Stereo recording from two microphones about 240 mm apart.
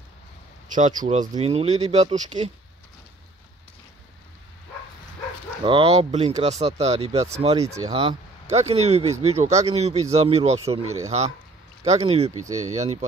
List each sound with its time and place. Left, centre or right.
0.7 s speech: right
5.6 s speech: right